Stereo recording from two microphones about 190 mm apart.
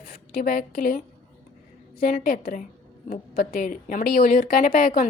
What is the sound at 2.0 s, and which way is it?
A woman's voice, 50° left (ahead or behind).